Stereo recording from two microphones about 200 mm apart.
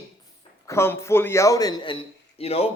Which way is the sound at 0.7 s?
10° left (ahead or behind).